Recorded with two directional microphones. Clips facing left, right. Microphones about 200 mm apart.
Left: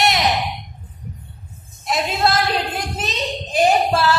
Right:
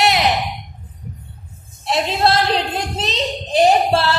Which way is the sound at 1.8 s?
30° right (ahead or behind).